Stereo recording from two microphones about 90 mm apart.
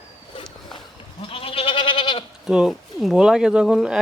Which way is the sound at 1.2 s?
90° left.